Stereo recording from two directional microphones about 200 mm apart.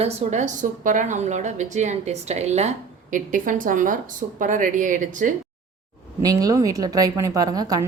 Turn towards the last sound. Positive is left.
turn(degrees=-20)  # may be behind; listen again after turning